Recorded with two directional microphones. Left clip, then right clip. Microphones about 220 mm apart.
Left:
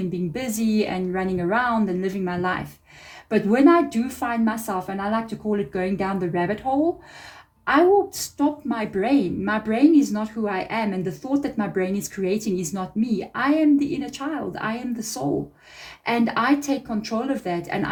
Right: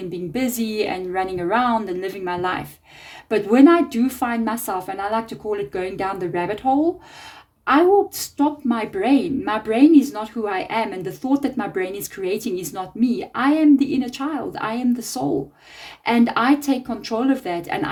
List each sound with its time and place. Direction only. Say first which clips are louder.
0.3 s a woman's voice: right 2 dB; 50° right (ahead or behind)